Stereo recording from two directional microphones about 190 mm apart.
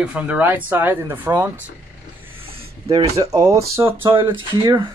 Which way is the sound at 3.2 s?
20° right (ahead or behind).